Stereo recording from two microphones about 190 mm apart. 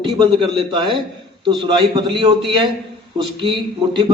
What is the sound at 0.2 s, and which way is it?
A man's voice, 25° right (ahead or behind).